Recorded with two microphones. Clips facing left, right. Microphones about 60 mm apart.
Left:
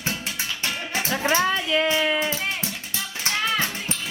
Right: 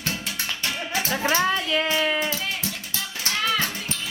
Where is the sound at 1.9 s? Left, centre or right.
Centre.